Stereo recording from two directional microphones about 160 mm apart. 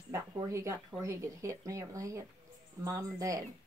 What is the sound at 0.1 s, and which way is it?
Speech, 20° right (ahead or behind).